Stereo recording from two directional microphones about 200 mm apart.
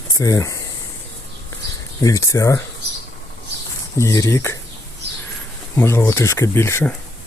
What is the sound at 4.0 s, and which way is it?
Speech, 15° left (ahead or behind).